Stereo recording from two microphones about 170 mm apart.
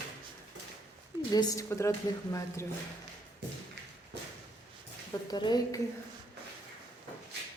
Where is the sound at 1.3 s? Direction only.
20° left (ahead or behind).